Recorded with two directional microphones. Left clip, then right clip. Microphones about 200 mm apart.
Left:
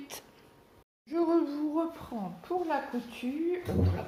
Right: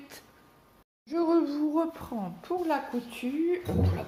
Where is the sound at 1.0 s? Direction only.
15° right (ahead or behind).